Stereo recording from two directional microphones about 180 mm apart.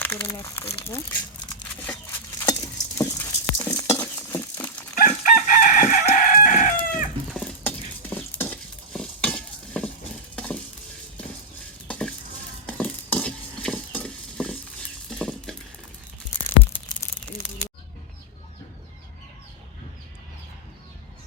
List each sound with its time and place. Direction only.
0.0 s speech: 10° left (ahead or behind)
2.4 s a sound: 20° left (ahead or behind)
3.0 s patter: 10° left (ahead or behind)
3.9 s stir: 15° left (ahead or behind)
4.9 s chicken: 45° left (ahead or behind)
7.3 s stir: 5° left (ahead or behind)
10.3 s a sound: 5° left (ahead or behind)
11.9 s stir: 5° left (ahead or behind)
15.1 s a sound: 5° left (ahead or behind)